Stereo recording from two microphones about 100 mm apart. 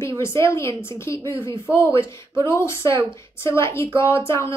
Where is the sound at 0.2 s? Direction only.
25° left (ahead or behind).